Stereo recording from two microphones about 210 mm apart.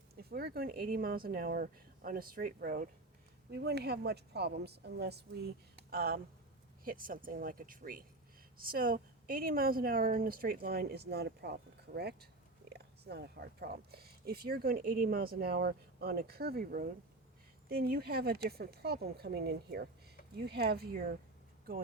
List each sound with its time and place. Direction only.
0.2 s speech: 45° right (ahead or behind)